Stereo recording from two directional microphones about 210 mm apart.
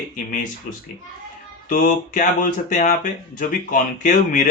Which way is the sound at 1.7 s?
40° left (ahead or behind).